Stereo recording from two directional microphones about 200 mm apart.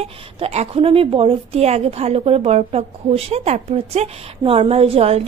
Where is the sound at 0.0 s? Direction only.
30° right (ahead or behind).